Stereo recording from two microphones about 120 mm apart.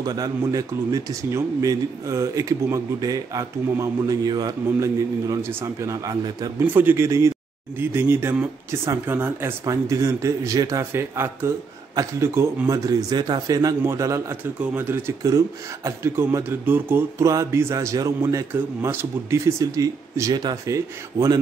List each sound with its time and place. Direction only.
0.0 s speech: 30° right (ahead or behind)
6.6 s speech: 15° right (ahead or behind)